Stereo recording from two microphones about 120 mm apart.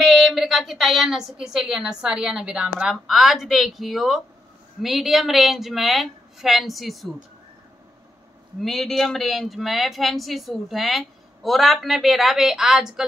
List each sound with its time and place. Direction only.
0.0 s speech: centre (ahead or behind)
8.5 s speech: centre (ahead or behind)